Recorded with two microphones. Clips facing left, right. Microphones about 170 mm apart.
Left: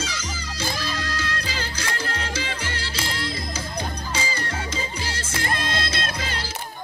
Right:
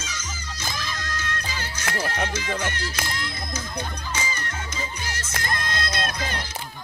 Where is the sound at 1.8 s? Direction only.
60° right (ahead or behind).